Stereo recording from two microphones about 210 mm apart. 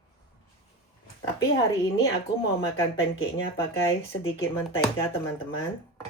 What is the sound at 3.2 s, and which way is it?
Speech, 75° left (ahead or behind).